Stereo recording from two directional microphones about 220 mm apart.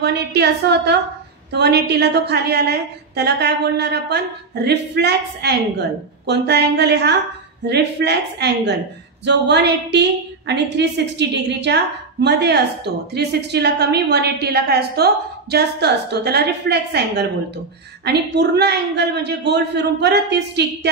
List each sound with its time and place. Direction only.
0.0 s a woman's voice: 50° right (ahead or behind)